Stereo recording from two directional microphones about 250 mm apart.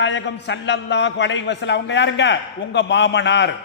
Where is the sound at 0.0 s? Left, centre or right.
Left.